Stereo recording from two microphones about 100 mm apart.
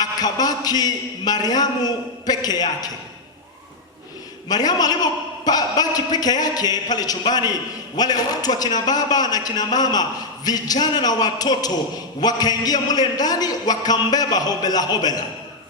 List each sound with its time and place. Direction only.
0.0 s a man's voice: 40° left (ahead or behind)
4.4 s a man's voice: 40° left (ahead or behind)